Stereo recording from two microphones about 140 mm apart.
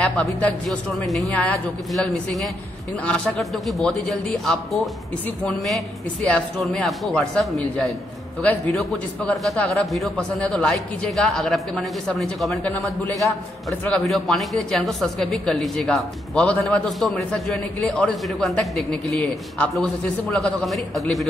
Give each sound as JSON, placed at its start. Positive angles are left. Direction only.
{"t": 0.0, "sound": "a man's voice", "side_deg": 10}
{"t": 6.2, "sound": "a man's voice", "side_deg": 5}
{"t": 12.6, "sound": "a man's voice", "side_deg": 15}
{"t": 13.1, "sound": "a man's voice", "side_deg": 0}